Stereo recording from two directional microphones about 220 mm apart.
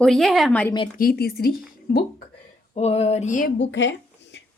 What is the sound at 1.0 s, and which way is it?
Speech, 45° left (ahead or behind).